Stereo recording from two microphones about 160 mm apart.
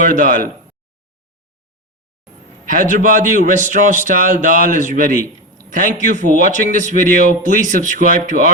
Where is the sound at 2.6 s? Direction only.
55° right (ahead or behind).